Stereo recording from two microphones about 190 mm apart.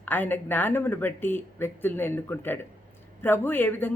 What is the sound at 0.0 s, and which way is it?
Speech, 10° left (ahead or behind).